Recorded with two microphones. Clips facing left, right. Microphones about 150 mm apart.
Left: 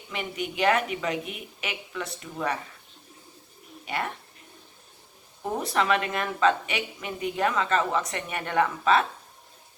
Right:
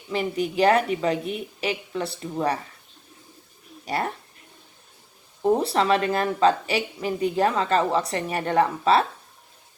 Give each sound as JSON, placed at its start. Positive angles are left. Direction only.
{"t": 0.1, "sound": "a woman's voice", "side_deg": -35}
{"t": 3.8, "sound": "a woman's voice", "side_deg": -35}
{"t": 5.4, "sound": "a woman's voice", "side_deg": -30}